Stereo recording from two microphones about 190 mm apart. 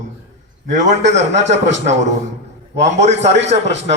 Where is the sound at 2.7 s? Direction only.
35° right (ahead or behind).